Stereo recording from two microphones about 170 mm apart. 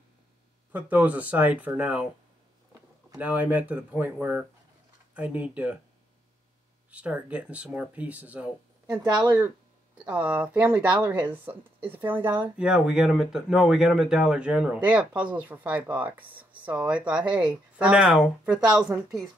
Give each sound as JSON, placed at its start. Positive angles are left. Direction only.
{"t": 0.7, "sound": "speech", "side_deg": -10}
{"t": 3.2, "sound": "speech", "side_deg": -10}
{"t": 6.9, "sound": "speech", "side_deg": -10}
{"t": 9.0, "sound": "speech", "side_deg": -25}
{"t": 10.0, "sound": "speech", "side_deg": -10}